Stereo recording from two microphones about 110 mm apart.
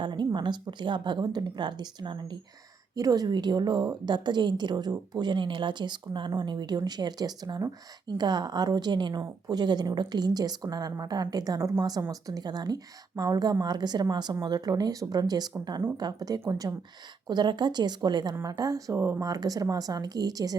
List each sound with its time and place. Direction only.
0.0 s a sound: 45° right (ahead or behind)
0.3 s a woman's voice: 45° right (ahead or behind); by 19.2 s 25° right (ahead or behind)
19.2 s a woman's voice: 35° right (ahead or behind)